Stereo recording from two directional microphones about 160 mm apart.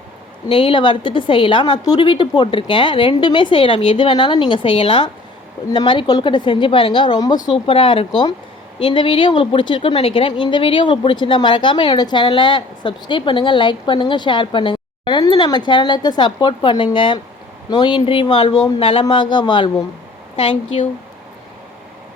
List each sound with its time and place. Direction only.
0.4 s a woman's voice: 35° left (ahead or behind)